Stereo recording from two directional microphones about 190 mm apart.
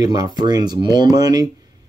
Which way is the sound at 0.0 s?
20° right (ahead or behind).